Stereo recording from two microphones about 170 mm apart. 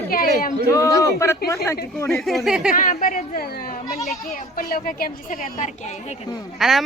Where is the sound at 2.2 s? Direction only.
Centre (ahead or behind).